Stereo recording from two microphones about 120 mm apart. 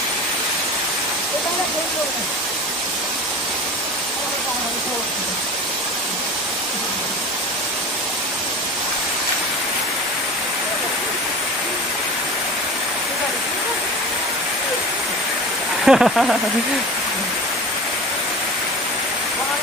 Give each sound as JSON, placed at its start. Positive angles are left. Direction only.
{"t": 15.8, "sound": "speech", "side_deg": 0}